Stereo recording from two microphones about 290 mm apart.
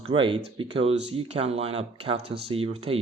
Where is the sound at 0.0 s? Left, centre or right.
Centre.